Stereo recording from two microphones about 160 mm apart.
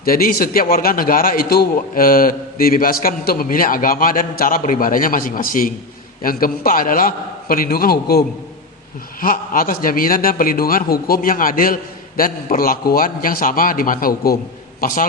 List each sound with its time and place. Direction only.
0.0 s a man's voice: 65° left (ahead or behind)
9.2 s a man's voice: 60° left (ahead or behind)